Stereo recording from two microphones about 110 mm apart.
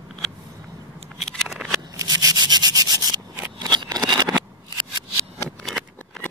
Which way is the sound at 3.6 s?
40° right (ahead or behind).